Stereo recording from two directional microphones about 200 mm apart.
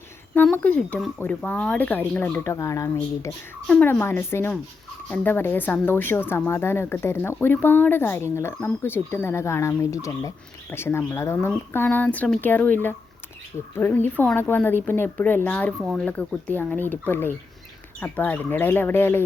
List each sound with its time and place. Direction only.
0.3 s speech: 10° left (ahead or behind)